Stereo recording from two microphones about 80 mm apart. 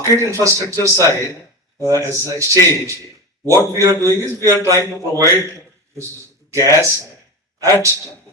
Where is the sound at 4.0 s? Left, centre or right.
Left.